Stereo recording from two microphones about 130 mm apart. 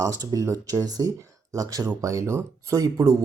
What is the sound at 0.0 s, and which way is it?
Speech, 25° right (ahead or behind).